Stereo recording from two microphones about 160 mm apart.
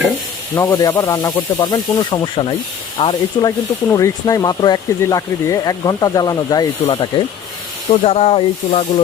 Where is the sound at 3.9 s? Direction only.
20° left (ahead or behind).